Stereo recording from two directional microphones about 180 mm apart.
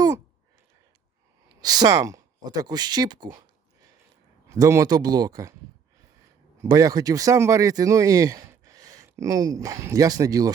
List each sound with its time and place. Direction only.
1.6 s speech: 20° right (ahead or behind)
4.4 s speech: 20° right (ahead or behind)
6.6 s speech: 20° right (ahead or behind)